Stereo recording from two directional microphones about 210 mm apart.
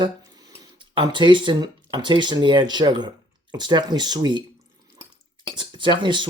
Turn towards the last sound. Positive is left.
turn(degrees=-20)  # may be behind; listen again after turning